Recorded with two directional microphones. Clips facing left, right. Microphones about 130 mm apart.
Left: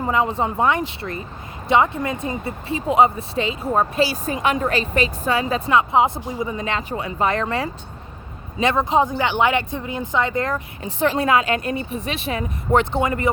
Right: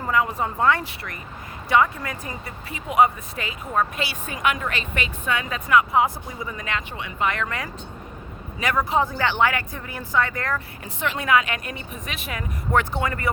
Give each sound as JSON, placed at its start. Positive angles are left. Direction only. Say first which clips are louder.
{"t": 0.0, "sound": "speech", "louder": "left 3 dB", "side_deg": 25}
{"t": 11.0, "sound": "a woman's voice", "louder": "left 4 dB", "side_deg": 35}